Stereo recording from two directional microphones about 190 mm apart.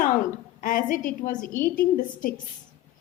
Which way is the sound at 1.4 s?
10° left (ahead or behind).